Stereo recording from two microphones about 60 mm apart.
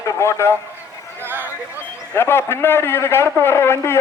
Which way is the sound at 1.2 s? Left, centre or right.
Right.